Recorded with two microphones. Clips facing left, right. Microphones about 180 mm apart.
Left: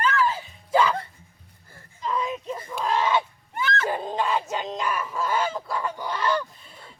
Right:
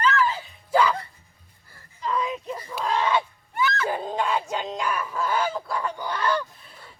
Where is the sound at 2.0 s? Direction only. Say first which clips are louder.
Right 1 dB; 10° left (ahead or behind).